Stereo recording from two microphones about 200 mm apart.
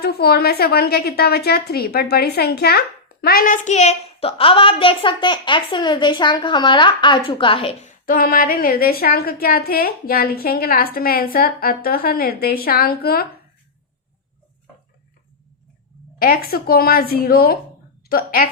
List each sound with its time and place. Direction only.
0.0 s a woman's voice: 50° left (ahead or behind)
16.1 s a woman's voice: 45° left (ahead or behind)